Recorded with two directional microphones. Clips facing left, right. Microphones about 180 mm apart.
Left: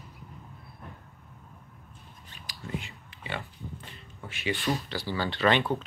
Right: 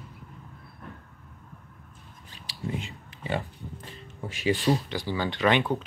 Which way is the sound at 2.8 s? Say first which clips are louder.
Right 5 dB; 40° right (ahead or behind).